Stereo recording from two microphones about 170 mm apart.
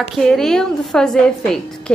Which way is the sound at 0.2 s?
5° left (ahead or behind).